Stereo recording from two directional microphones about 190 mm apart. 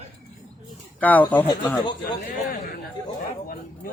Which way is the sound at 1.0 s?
10° left (ahead or behind).